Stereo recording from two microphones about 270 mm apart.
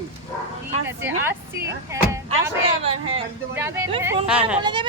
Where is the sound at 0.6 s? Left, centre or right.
Centre.